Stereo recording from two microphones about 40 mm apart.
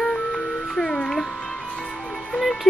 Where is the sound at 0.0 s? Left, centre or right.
Centre.